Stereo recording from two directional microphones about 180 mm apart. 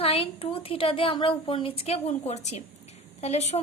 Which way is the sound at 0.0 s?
30° left (ahead or behind).